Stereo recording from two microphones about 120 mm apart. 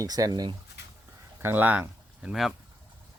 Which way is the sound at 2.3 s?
Centre (ahead or behind).